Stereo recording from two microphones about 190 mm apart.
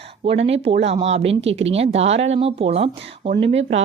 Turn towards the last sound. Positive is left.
turn(degrees=-30)  # may be behind; listen again after turning